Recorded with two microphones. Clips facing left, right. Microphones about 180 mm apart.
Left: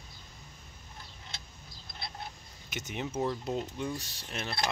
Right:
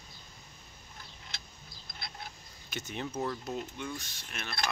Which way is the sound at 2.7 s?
20° left (ahead or behind).